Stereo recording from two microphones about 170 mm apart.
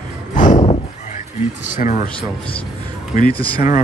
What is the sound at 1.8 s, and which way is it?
Speech, 45° left (ahead or behind).